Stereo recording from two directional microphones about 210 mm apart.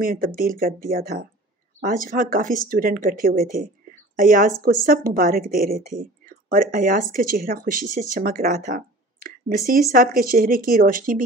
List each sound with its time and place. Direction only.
0.0 s a woman's voice: 45° right (ahead or behind)